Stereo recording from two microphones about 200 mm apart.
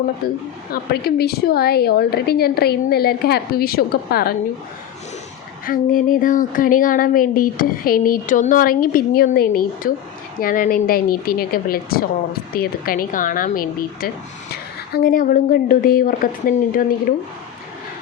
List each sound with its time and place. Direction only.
0.2 s speech: 50° left (ahead or behind)
5.6 s speech: 45° left (ahead or behind)